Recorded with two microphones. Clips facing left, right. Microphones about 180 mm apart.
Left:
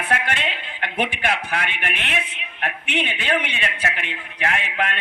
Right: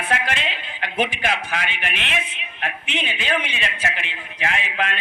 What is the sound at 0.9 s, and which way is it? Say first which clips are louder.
Speech: right 1 dB; 60° left (ahead or behind).